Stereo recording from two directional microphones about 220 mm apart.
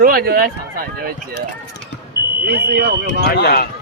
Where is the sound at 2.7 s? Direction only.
45° right (ahead or behind).